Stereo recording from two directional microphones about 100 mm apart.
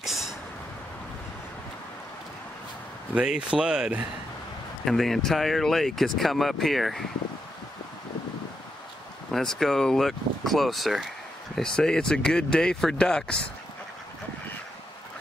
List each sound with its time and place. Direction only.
0.0 s a sound: centre (ahead or behind)
3.2 s speech: 10° right (ahead or behind)
4.8 s speech: centre (ahead or behind)
9.3 s speech: 5° left (ahead or behind)